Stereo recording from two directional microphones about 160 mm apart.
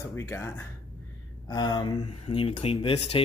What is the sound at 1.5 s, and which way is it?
Speech, 25° left (ahead or behind).